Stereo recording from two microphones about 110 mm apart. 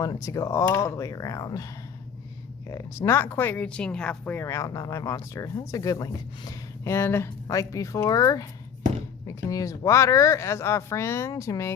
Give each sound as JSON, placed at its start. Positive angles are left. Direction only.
{"t": 0.0, "sound": "speech", "side_deg": 30}
{"t": 2.6, "sound": "speech", "side_deg": 30}
{"t": 4.4, "sound": "speech", "side_deg": 25}